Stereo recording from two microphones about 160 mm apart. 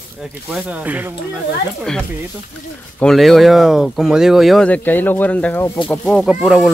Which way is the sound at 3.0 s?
Centre (ahead or behind).